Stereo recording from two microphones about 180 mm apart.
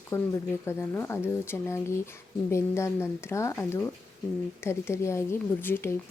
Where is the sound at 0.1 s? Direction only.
15° left (ahead or behind).